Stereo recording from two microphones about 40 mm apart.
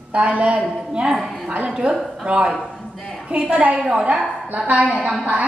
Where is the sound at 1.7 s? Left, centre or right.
Right.